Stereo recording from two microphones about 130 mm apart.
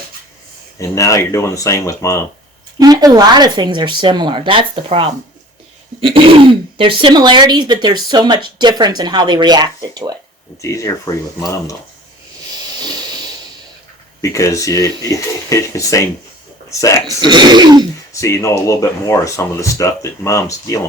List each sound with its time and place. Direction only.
0.8 s speech: 25° left (ahead or behind)
2.7 s speech: 30° right (ahead or behind)
10.6 s speech: 25° left (ahead or behind)
14.2 s speech: 25° left (ahead or behind)
17.2 s speech: 35° right (ahead or behind)
18.1 s speech: 20° left (ahead or behind)